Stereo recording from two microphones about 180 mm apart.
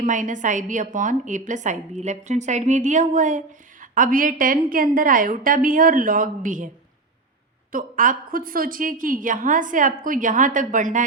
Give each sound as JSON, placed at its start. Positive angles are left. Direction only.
{"t": 0.0, "sound": "a woman's voice", "side_deg": -45}
{"t": 7.7, "sound": "a woman's voice", "side_deg": -50}